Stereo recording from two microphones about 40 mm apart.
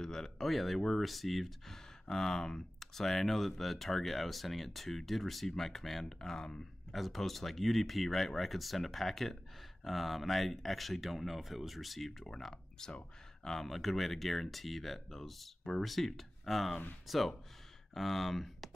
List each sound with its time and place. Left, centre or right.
0.0 s speech: centre
2.0 s speech: centre
6.9 s speech: centre
12.8 s speech: centre